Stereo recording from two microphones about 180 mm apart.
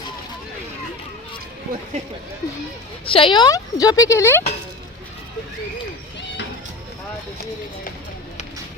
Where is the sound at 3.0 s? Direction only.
30° left (ahead or behind).